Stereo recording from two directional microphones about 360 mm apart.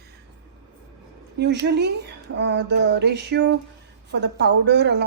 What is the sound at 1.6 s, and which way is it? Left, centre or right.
A woman's voice, right.